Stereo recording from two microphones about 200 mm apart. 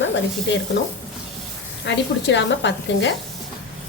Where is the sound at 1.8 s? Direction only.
60° left (ahead or behind).